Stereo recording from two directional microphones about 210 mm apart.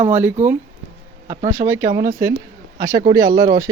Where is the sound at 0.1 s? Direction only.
10° right (ahead or behind).